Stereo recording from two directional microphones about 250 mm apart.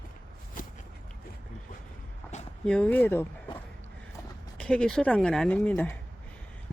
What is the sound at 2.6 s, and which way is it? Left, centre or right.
Speech, centre.